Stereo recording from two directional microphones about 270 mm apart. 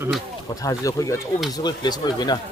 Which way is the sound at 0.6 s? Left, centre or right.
Centre.